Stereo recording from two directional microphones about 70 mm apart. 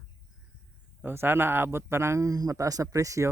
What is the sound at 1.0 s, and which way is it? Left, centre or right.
Speech, right.